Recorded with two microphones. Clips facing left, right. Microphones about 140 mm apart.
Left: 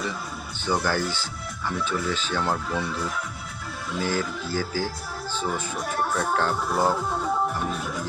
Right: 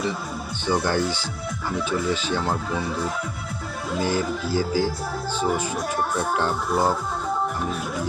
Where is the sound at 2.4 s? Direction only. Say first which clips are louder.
Right 1 dB; centre (ahead or behind).